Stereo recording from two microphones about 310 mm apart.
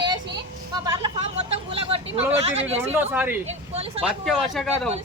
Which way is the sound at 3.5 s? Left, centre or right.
Centre.